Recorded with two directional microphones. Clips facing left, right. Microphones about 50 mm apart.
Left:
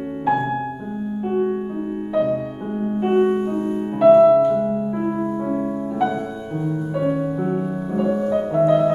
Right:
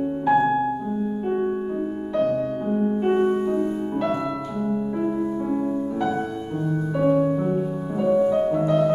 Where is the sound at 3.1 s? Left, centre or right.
Left.